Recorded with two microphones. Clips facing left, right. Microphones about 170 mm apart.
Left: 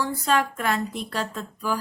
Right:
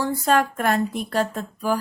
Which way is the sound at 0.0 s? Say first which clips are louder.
Right 3 dB; 50° right (ahead or behind).